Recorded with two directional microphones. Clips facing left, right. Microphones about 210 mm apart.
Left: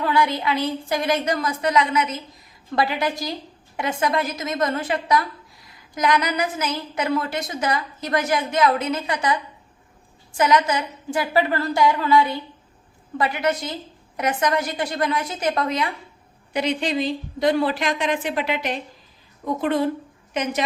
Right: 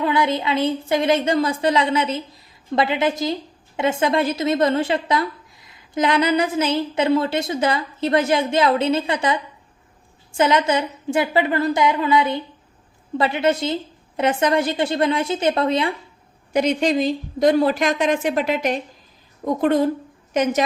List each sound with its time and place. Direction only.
0.0 s a woman's voice: 20° right (ahead or behind)
16.5 s a woman's voice: 45° right (ahead or behind)